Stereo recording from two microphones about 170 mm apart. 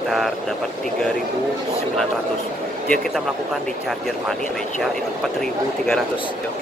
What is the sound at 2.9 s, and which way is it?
Speech, centre (ahead or behind).